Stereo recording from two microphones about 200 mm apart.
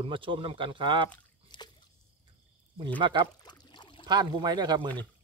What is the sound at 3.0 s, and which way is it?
Speech, 25° right (ahead or behind).